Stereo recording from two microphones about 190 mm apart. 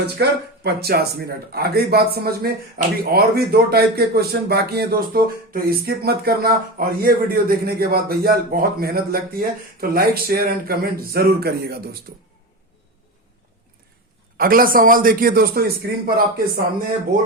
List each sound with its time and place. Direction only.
0.2 s speech: 55° right (ahead or behind)
14.3 s speech: 50° right (ahead or behind)